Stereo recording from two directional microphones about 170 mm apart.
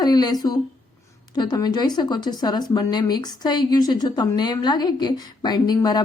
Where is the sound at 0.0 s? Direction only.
25° left (ahead or behind).